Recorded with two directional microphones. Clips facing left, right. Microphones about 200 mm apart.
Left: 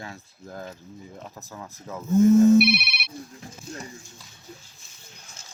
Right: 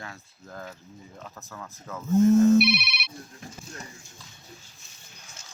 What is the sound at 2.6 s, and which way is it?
Speech, 55° left (ahead or behind).